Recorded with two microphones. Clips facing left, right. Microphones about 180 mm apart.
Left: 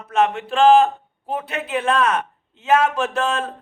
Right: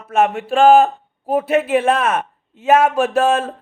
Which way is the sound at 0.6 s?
50° right (ahead or behind).